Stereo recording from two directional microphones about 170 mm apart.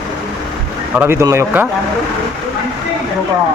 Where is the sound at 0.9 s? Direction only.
15° right (ahead or behind).